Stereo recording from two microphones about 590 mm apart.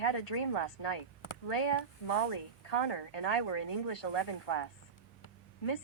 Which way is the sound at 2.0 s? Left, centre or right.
Left.